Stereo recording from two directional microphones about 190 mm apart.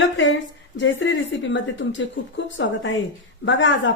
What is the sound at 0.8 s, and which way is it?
A woman's voice, 75° left (ahead or behind).